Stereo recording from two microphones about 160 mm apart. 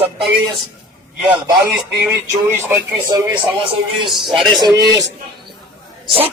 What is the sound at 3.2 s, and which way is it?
Speech, 25° right (ahead or behind).